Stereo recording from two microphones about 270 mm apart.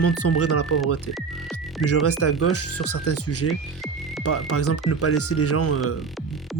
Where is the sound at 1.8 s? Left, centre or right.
Left.